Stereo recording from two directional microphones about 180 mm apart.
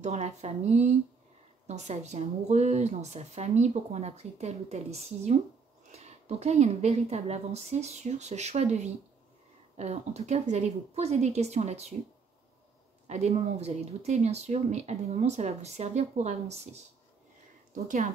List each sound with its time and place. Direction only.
0.0 s speech: 40° right (ahead or behind)
13.0 s speech: 40° right (ahead or behind)